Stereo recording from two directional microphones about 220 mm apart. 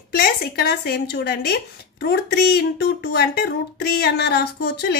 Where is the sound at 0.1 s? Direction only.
45° left (ahead or behind).